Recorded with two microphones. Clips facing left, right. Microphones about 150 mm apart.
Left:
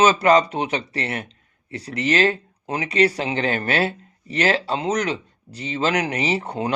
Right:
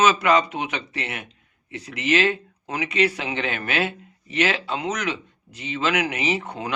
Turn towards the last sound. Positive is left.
turn(degrees=35)  # may be behind; listen again after turning